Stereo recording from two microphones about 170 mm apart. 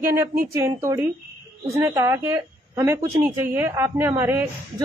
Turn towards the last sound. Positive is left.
turn(degrees=-15)  # may be behind; listen again after turning